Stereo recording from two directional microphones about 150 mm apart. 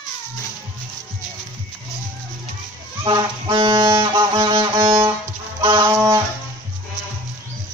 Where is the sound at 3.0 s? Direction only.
30° right (ahead or behind).